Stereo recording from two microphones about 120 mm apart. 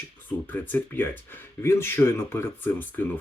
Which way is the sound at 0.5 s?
15° left (ahead or behind).